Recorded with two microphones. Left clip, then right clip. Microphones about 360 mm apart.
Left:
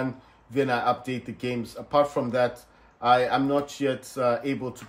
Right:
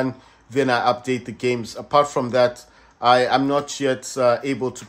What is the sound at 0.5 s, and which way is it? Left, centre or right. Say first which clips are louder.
Speech: right 5 dB; right.